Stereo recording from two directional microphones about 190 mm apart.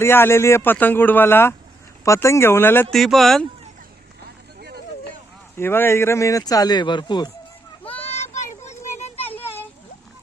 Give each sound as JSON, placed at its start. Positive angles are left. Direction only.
{"t": 0.0, "sound": "speech", "side_deg": 10}
{"t": 2.9, "sound": "speech", "side_deg": 0}
{"t": 5.5, "sound": "speech", "side_deg": 10}
{"t": 8.1, "sound": "children playing", "side_deg": 35}
{"t": 8.4, "sound": "a sound", "side_deg": 40}